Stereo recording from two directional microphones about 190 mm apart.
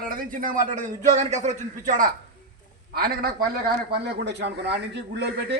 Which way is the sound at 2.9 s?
55° right (ahead or behind).